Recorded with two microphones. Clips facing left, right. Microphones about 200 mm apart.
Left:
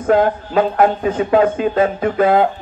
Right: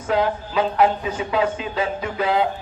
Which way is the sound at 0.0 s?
50° left (ahead or behind).